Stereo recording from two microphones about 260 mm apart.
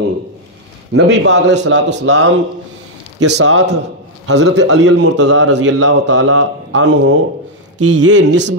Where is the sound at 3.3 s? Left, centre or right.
Right.